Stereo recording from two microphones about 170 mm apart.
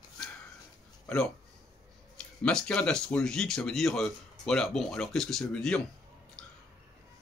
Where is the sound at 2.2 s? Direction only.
5° left (ahead or behind).